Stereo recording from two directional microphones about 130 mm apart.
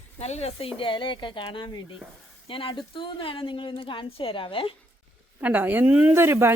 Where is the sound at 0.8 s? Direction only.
40° left (ahead or behind).